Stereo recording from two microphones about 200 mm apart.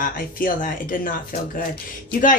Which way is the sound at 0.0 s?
45° left (ahead or behind).